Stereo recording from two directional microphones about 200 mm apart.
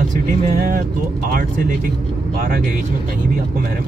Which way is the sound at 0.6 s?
45° right (ahead or behind).